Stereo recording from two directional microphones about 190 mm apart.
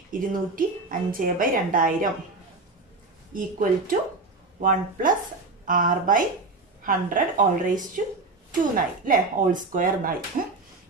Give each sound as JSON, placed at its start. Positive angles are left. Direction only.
{"t": 0.1, "sound": "a woman's voice", "side_deg": -45}
{"t": 3.3, "sound": "a woman's voice", "side_deg": -45}